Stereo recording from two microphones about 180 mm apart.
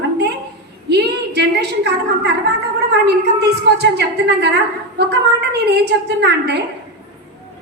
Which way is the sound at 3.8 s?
70° right (ahead or behind).